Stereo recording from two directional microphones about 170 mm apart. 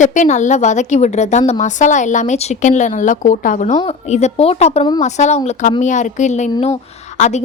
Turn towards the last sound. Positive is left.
turn(degrees=40)  # may be behind; listen again after turning